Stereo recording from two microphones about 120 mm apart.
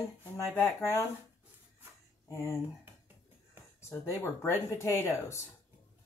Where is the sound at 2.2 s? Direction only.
25° left (ahead or behind).